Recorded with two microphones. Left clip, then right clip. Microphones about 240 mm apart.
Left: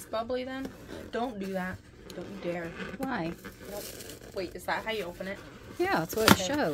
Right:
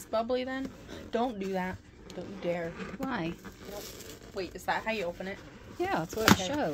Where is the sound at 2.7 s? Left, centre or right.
Centre.